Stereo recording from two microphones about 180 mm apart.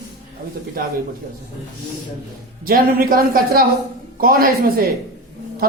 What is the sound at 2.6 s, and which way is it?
Speech, 50° right (ahead or behind).